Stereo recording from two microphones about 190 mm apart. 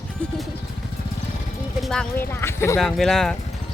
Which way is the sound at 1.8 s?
5° left (ahead or behind).